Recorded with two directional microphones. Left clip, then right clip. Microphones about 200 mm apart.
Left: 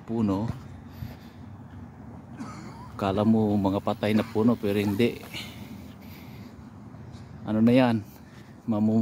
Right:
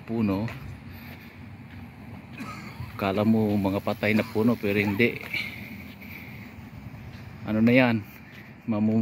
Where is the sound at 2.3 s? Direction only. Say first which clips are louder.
Right 3 dB; 35° right (ahead or behind).